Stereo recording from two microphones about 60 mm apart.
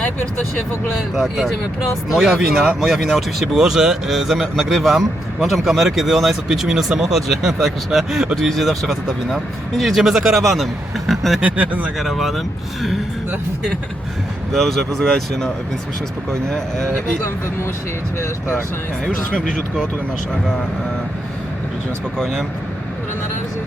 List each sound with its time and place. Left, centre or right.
1.1 s speech: centre
11.4 s speech: right
11.9 s speech: centre
14.5 s speech: centre
18.2 s speech: left
19.0 s speech: centre
22.2 s speech: centre